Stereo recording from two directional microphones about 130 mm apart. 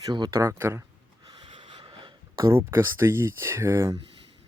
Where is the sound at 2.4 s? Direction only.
20° right (ahead or behind).